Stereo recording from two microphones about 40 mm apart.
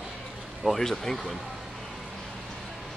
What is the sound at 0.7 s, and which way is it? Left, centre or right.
Speech, centre.